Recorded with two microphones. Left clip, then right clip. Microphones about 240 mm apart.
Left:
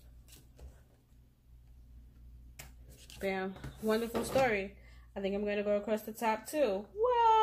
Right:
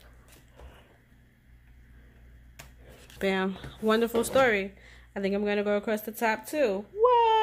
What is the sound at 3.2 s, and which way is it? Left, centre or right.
Speech, right.